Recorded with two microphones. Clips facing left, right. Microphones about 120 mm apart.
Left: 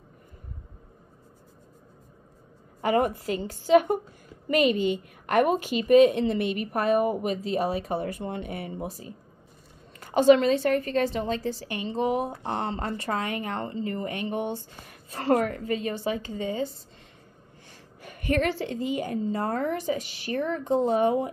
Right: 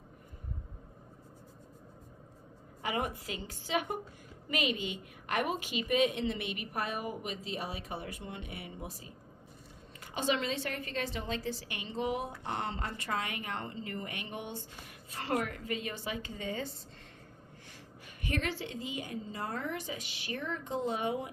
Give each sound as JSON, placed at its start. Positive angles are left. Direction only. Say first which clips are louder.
{"t": 2.8, "sound": "a woman's voice", "louder": "left 11 dB", "side_deg": 45}
{"t": 18.0, "sound": "a woman's voice", "louder": "left 10 dB", "side_deg": 55}